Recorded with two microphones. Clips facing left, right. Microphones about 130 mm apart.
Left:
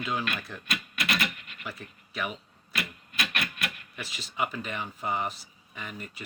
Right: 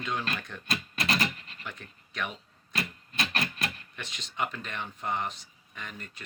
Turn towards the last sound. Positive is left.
turn(degrees=5)  # may be behind; listen again after turning